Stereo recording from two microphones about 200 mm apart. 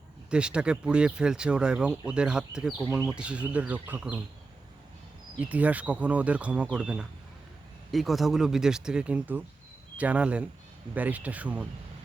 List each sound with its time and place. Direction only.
0.3 s speech: 5° right (ahead or behind)
5.4 s speech: 5° right (ahead or behind)